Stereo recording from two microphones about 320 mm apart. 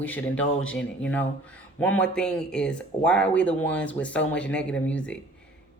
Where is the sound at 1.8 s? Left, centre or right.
Centre.